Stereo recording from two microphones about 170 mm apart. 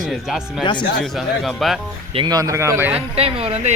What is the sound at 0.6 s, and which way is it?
Speech, 25° left (ahead or behind).